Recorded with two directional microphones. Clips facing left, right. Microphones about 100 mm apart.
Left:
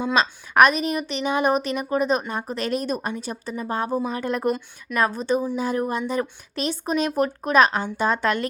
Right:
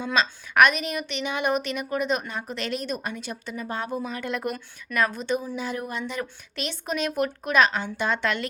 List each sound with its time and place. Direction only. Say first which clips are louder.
0.2 s a woman's voice: left 2 dB; 40° left (ahead or behind)